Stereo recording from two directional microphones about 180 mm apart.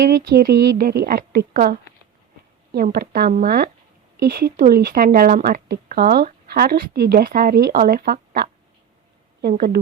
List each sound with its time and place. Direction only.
0.0 s speech: 60° right (ahead or behind)
2.7 s speech: 55° right (ahead or behind)